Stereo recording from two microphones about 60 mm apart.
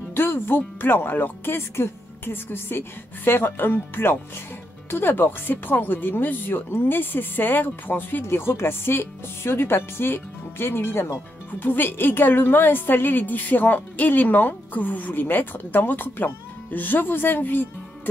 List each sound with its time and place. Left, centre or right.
0.1 s speech: left